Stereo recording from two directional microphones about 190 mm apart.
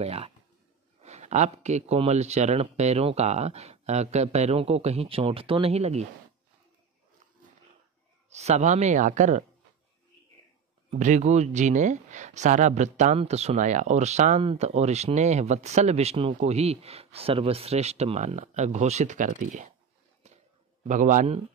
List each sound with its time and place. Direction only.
0.0 s speech: 30° right (ahead or behind)
8.3 s speech: 35° right (ahead or behind)
10.9 s speech: 40° right (ahead or behind)
20.2 s a sound: 35° right (ahead or behind)
20.8 s a man's voice: 40° right (ahead or behind)